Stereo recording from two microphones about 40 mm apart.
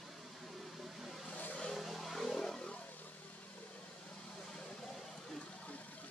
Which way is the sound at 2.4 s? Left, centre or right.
Centre.